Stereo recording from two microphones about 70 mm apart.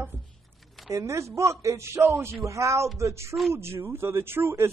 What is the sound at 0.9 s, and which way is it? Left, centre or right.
A man's voice, right.